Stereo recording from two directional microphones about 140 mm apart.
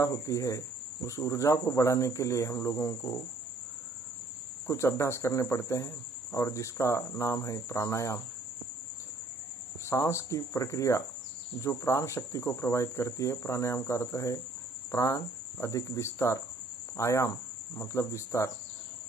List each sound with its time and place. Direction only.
0.0 s cricket: 20° left (ahead or behind)
4.6 s cricket: 20° left (ahead or behind)
9.8 s cricket: 20° left (ahead or behind)